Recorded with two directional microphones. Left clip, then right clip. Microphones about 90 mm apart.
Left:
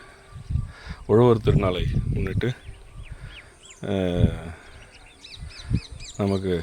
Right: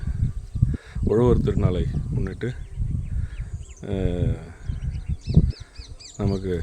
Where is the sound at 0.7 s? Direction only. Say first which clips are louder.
Left 3 dB; 50° right (ahead or behind).